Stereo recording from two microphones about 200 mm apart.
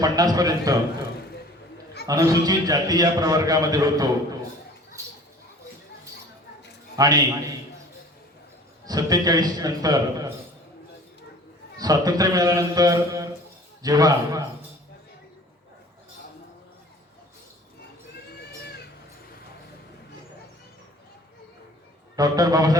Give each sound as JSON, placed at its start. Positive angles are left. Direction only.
{"t": 0.0, "sound": "a man's voice", "side_deg": -20}
{"t": 2.0, "sound": "a man's voice", "side_deg": -15}
{"t": 5.0, "sound": "a sound", "side_deg": -15}
{"t": 6.9, "sound": "a man's voice", "side_deg": -20}
{"t": 8.9, "sound": "a man's voice", "side_deg": -20}
{"t": 11.8, "sound": "a man's voice", "side_deg": -20}
{"t": 22.1, "sound": "a man's voice", "side_deg": -20}